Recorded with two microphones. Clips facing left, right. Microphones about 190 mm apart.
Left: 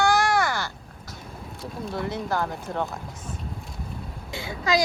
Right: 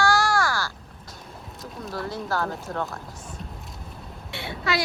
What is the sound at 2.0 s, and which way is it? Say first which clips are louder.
Speech: left 1 dB; 20° left (ahead or behind).